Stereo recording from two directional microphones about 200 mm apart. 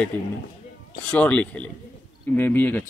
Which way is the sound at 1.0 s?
5° left (ahead or behind).